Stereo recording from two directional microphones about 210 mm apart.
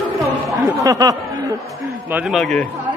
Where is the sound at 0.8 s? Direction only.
15° right (ahead or behind).